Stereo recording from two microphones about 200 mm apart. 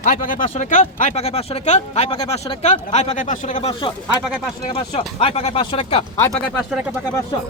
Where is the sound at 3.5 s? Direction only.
25° left (ahead or behind).